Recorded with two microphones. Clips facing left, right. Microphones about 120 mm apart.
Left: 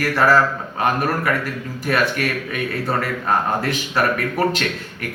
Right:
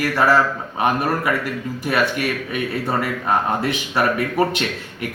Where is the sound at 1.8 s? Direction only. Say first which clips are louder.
Left 1 dB; 20° right (ahead or behind).